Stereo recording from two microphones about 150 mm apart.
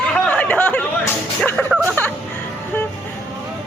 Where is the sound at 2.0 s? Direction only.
15° left (ahead or behind).